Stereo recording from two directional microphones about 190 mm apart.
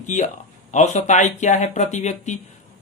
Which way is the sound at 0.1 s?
35° left (ahead or behind).